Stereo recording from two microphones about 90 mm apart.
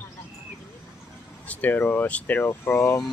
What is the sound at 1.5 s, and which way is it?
Speech, 20° left (ahead or behind).